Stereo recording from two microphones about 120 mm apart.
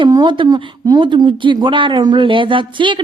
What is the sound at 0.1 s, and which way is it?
Speech, 40° right (ahead or behind).